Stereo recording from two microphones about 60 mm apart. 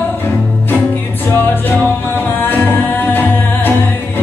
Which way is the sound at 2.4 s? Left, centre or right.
Left.